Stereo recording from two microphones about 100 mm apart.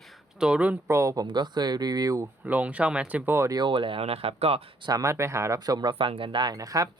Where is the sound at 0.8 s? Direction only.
30° right (ahead or behind).